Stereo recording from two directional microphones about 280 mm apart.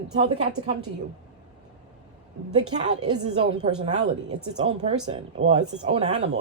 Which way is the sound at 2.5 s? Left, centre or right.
Right.